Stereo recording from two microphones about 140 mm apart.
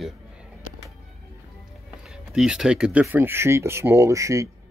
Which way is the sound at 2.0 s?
5° right (ahead or behind).